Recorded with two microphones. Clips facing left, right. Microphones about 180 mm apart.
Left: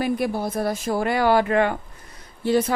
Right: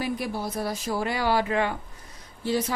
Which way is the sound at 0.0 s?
55° left (ahead or behind).